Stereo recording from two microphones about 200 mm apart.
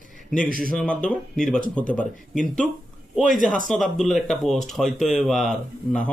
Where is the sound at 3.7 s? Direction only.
Centre (ahead or behind).